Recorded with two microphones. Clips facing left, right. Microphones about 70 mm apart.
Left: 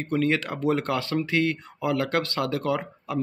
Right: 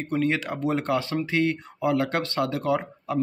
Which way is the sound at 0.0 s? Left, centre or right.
Centre.